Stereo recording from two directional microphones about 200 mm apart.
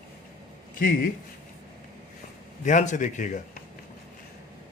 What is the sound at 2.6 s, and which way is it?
Speech, 40° left (ahead or behind).